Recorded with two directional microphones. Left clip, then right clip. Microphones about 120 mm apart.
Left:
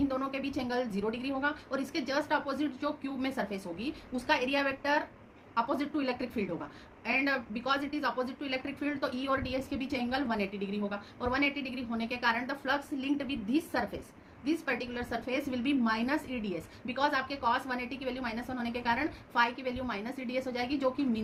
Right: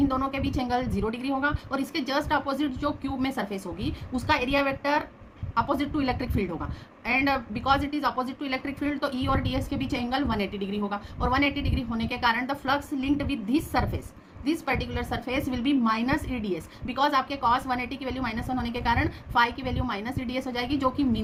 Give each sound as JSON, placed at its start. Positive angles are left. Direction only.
{"t": 0.1, "sound": "a woman's voice", "side_deg": -40}